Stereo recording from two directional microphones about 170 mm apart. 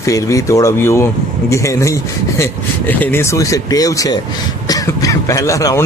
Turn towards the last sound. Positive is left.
turn(degrees=20)  # may be behind; listen again after turning